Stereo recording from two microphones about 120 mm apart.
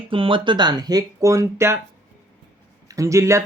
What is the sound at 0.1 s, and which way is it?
Speech, 45° right (ahead or behind).